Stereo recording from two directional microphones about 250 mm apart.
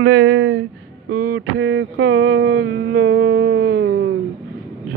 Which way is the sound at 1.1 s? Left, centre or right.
Right.